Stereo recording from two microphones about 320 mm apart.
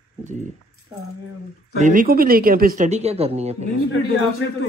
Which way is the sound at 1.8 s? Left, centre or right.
Right.